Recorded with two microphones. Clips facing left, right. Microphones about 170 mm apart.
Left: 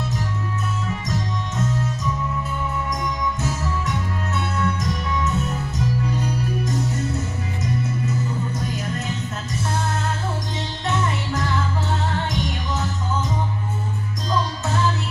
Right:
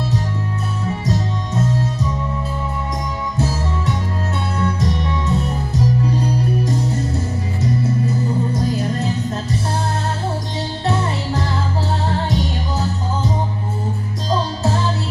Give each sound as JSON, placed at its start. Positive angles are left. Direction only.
{"t": 0.9, "sound": "music", "side_deg": -30}
{"t": 3.3, "sound": "music", "side_deg": -30}
{"t": 8.5, "sound": "music", "side_deg": -35}
{"t": 10.8, "sound": "music", "side_deg": -30}
{"t": 14.3, "sound": "music", "side_deg": -30}